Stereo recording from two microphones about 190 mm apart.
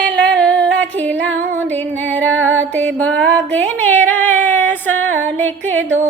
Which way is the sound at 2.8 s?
10° left (ahead or behind).